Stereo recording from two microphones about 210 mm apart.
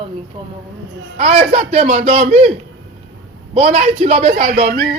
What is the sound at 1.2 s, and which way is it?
Speech, 30° right (ahead or behind).